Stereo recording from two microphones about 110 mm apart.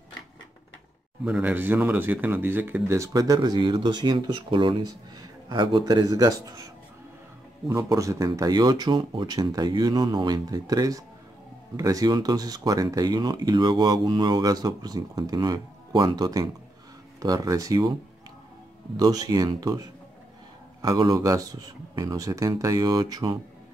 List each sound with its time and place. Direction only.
1.3 s a man's voice: 15° right (ahead or behind); by 17.9 s 30° right (ahead or behind)
18.9 s speech: 35° right (ahead or behind)